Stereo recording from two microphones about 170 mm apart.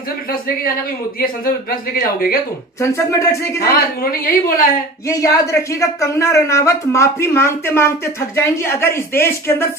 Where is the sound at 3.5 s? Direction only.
60° left (ahead or behind).